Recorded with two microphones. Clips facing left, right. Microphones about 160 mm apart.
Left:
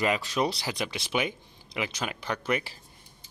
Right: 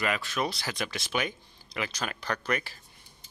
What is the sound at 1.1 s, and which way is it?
Speech, 15° left (ahead or behind).